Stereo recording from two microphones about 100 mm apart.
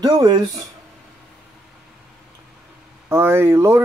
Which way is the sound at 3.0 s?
25° right (ahead or behind).